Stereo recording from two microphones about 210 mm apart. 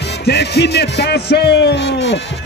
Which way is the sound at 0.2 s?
55° left (ahead or behind).